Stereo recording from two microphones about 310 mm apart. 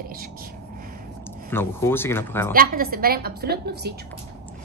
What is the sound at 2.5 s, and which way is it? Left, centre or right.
A woman's voice, right.